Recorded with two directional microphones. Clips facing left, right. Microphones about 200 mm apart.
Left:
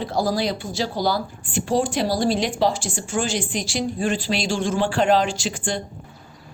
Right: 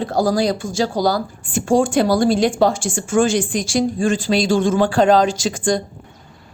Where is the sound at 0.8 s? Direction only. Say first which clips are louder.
Right 5 dB; 40° right (ahead or behind).